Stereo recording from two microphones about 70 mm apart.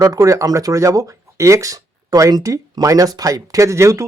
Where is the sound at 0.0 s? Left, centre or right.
Right.